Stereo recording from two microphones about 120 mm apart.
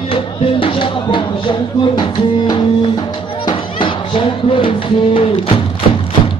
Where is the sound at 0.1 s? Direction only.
50° left (ahead or behind).